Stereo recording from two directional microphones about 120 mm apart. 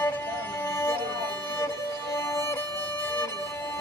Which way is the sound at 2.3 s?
20° left (ahead or behind).